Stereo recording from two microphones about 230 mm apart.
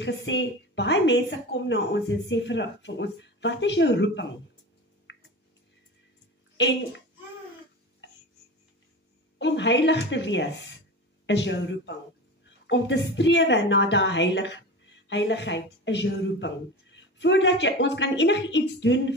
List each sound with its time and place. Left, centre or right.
0.0 s a woman's voice: left
5.1 s music: left
6.5 s a woman's voice: left
9.4 s a woman's voice: left